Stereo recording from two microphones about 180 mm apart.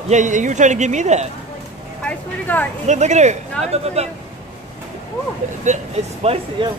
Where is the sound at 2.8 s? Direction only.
40° right (ahead or behind).